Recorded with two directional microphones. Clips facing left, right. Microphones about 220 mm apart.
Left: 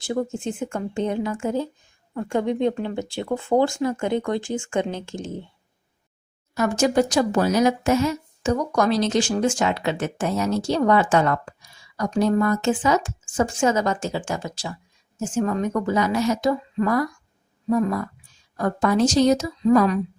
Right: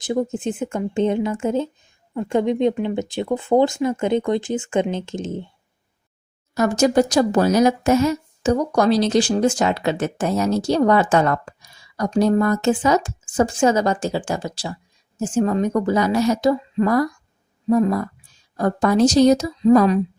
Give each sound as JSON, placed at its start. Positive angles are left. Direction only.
{"t": 0.0, "sound": "speech", "side_deg": -20}
{"t": 6.5, "sound": "speech", "side_deg": -40}